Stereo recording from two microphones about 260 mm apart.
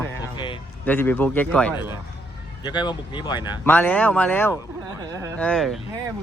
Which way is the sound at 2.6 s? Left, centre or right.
Centre.